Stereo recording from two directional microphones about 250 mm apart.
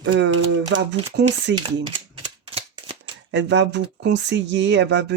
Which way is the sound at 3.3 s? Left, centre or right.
Right.